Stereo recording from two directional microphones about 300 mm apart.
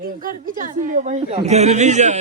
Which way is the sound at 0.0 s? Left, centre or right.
Right.